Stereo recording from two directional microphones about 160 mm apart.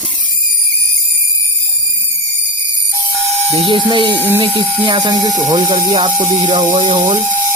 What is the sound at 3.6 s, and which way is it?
Speech, 30° right (ahead or behind).